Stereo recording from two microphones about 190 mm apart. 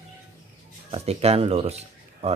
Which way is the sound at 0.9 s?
35° right (ahead or behind).